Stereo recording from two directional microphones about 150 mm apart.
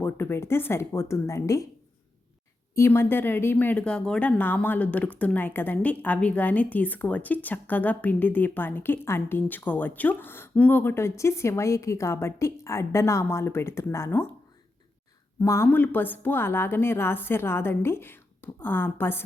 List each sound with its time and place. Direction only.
0.0 s speech: 15° left (ahead or behind)
2.7 s speech: 15° left (ahead or behind)
15.4 s speech: 20° left (ahead or behind)